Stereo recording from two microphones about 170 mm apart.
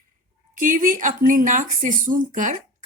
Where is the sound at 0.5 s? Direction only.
50° right (ahead or behind).